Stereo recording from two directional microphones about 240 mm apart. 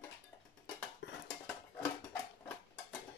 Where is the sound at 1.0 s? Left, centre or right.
Left.